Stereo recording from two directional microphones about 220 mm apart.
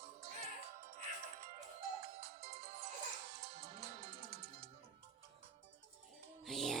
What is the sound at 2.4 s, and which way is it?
Music, 45° right (ahead or behind).